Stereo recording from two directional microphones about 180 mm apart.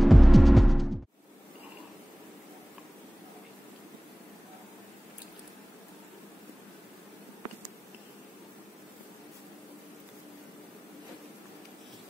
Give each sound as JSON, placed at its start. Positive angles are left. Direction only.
{"t": 0.0, "sound": "music", "side_deg": 0}